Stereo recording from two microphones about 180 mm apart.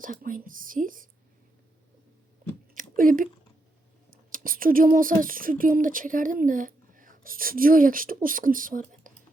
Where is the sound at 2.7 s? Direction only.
50° right (ahead or behind).